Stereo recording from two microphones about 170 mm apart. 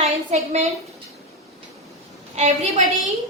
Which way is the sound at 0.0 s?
40° right (ahead or behind).